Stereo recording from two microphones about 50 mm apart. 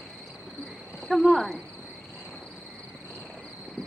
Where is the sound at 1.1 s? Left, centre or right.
Centre.